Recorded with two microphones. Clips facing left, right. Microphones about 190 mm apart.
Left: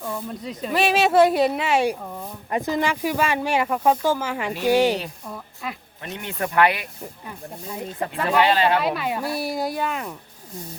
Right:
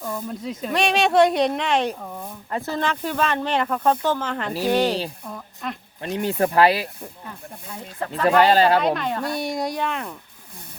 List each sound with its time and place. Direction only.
0.0 s a sound: 10° left (ahead or behind)
0.3 s speech: centre (ahead or behind)
6.0 s speech: 35° right (ahead or behind)
7.3 s speech: 15° left (ahead or behind)
8.4 s speech: 40° right (ahead or behind)
8.8 s speech: 5° left (ahead or behind)